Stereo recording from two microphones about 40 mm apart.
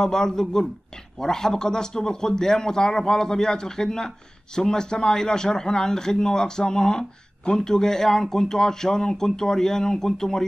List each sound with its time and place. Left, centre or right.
0.0 s speech: centre